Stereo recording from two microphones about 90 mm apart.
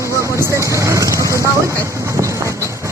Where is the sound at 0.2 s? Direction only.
30° right (ahead or behind).